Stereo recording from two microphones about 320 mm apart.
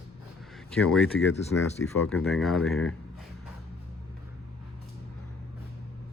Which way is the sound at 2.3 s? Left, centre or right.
Centre.